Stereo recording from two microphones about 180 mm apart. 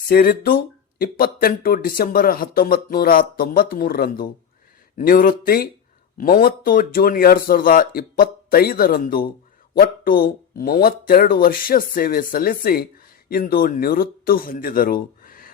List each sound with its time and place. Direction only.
0.1 s speech: 55° left (ahead or behind)